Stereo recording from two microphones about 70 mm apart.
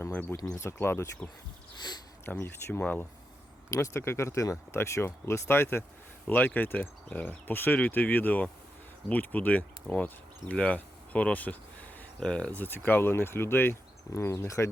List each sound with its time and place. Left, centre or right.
0.1 s speech: left
0.6 s speech: left
2.2 s speech: left
2.8 s speech: left
3.7 s speech: left
6.2 s speech: left
12.5 s speech: left
14.1 s speech: left